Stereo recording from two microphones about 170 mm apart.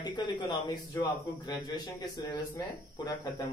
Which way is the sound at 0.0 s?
25° left (ahead or behind).